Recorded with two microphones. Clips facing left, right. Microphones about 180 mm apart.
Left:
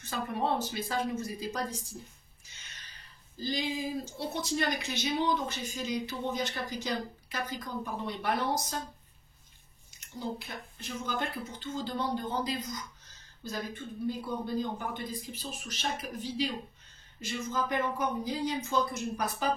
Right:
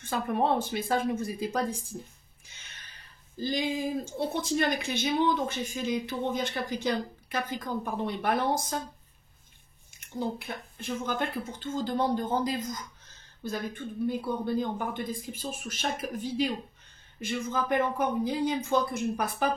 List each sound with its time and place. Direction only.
0.0 s speech: 55° right (ahead or behind)
9.9 s speech: 50° right (ahead or behind)